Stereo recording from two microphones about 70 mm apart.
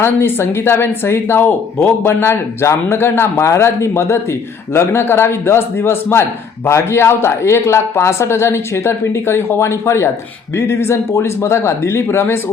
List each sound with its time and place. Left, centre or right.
0.0 s speech: left